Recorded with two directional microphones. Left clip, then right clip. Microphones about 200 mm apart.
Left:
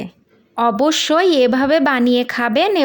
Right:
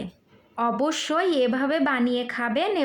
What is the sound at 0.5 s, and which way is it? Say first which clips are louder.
A woman's voice: left 9 dB; 40° left (ahead or behind).